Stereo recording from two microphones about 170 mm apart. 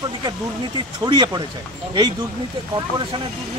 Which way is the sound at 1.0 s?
25° right (ahead or behind).